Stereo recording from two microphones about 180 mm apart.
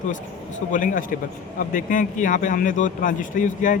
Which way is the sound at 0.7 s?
50° left (ahead or behind).